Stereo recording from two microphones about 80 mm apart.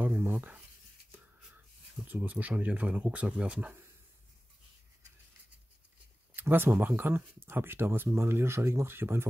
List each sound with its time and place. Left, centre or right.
0.0 s speech: right
1.1 s a sound: right
2.0 s speech: right
6.3 s speech: right